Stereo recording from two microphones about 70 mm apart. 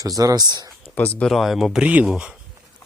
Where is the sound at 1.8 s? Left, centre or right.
Centre.